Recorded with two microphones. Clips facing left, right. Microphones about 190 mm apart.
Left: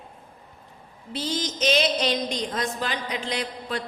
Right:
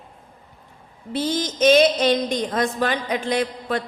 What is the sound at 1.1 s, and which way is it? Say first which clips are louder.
A man's voice: right 5 dB; 55° right (ahead or behind).